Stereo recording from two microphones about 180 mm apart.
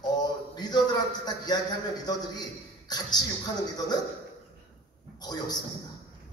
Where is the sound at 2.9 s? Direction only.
20° left (ahead or behind).